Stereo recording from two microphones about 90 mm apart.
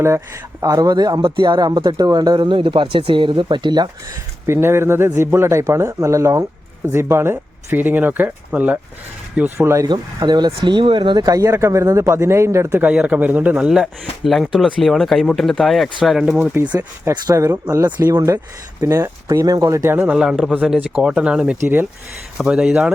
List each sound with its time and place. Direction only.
0.6 s speech: 45° right (ahead or behind)
1.2 s speech: 60° right (ahead or behind)
4.4 s a man's voice: 30° right (ahead or behind)
9.6 s speech: 30° right (ahead or behind)
9.8 s speech: 50° right (ahead or behind)
11.5 s speech: 35° right (ahead or behind)
12.9 s speech: 15° right (ahead or behind)
13.7 s speech: 5° right (ahead or behind)
16.6 s a man's voice: 30° right (ahead or behind)
18.8 s a man's voice: 30° right (ahead or behind)
19.3 s speech: 40° right (ahead or behind)
20.1 s speech: 5° right (ahead or behind)
22.4 s speech: 5° right (ahead or behind)